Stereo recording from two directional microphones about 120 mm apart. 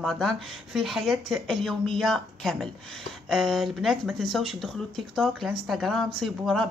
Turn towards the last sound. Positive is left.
turn(degrees=0)  # may be behind; listen again after turning